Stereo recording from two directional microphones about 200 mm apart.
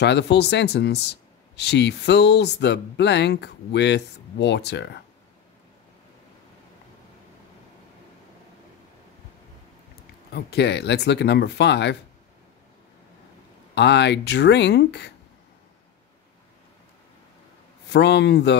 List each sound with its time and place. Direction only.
0.0 s speech: 60° left (ahead or behind)
10.3 s speech: 55° left (ahead or behind)
13.7 s speech: 60° left (ahead or behind)
17.8 s speech: 60° left (ahead or behind)